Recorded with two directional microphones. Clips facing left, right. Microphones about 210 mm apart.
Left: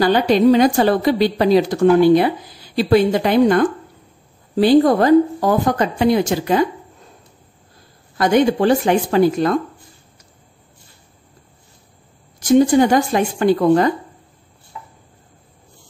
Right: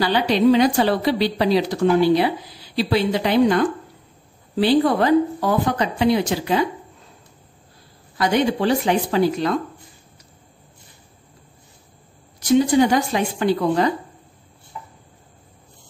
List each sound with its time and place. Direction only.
0.0 s a woman's voice: 45° left (ahead or behind)
8.2 s a woman's voice: 50° left (ahead or behind)
12.4 s a woman's voice: 50° left (ahead or behind)